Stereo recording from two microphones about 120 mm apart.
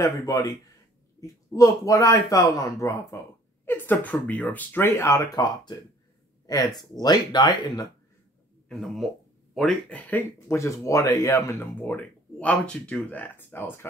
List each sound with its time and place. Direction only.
0.0 s speech: 30° left (ahead or behind)
8.6 s speech: centre (ahead or behind)
10.5 s speech: 25° left (ahead or behind)
11.9 s speech: 10° left (ahead or behind)